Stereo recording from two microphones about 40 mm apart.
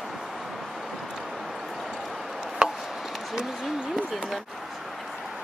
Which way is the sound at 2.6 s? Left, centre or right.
Centre.